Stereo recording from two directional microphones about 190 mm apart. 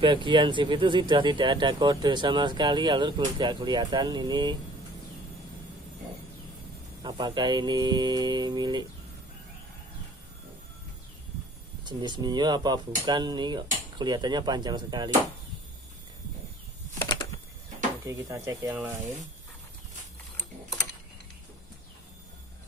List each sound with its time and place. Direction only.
0.0 s speech: 25° right (ahead or behind)
7.0 s speech: 25° right (ahead or behind)
11.8 s speech: 20° right (ahead or behind)
18.0 s speech: 15° right (ahead or behind)
20.3 s a sound: 10° left (ahead or behind)